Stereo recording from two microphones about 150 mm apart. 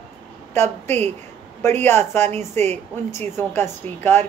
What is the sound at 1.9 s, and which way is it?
Speech, 50° right (ahead or behind).